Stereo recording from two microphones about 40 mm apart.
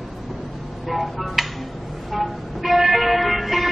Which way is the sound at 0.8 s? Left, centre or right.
Centre.